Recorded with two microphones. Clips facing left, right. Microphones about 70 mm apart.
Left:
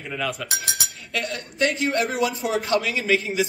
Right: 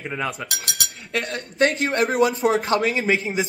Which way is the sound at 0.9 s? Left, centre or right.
Right.